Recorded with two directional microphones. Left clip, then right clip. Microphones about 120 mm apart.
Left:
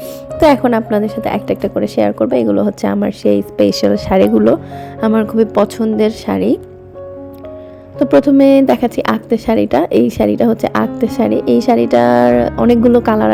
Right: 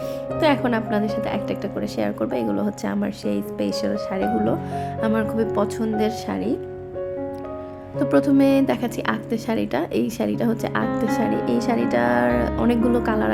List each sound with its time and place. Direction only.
0.3 s speech: 45° left (ahead or behind)
0.6 s a woman's voice: 30° left (ahead or behind); by 4.4 s 65° left (ahead or behind)
5.1 s a woman's voice: 35° left (ahead or behind); by 6.6 s 50° left (ahead or behind)
7.9 s a woman's voice: 25° left (ahead or behind)